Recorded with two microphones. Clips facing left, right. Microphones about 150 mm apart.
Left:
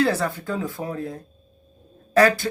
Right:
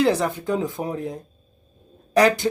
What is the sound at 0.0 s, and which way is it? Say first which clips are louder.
Speech: right 2 dB; 15° right (ahead or behind).